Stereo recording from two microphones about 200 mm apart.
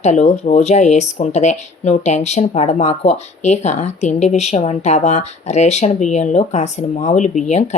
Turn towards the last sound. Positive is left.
turn(degrees=35)  # may be behind; listen again after turning